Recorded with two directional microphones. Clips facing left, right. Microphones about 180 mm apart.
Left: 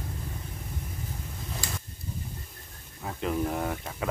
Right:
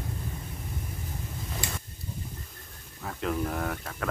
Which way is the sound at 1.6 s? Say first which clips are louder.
Right 1 dB; 20° right (ahead or behind).